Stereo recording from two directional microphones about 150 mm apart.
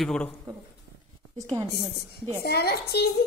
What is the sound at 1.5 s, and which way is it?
Speech, 25° right (ahead or behind).